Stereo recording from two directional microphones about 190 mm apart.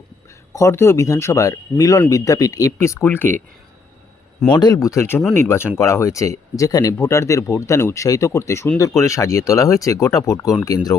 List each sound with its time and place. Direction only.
0.5 s speech: 15° left (ahead or behind)
4.5 s speech: 20° left (ahead or behind)